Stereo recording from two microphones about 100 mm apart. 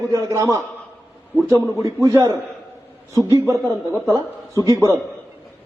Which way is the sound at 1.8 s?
35° right (ahead or behind).